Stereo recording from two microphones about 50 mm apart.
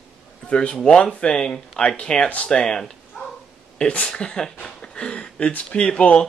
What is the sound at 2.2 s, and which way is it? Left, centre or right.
Speech, left.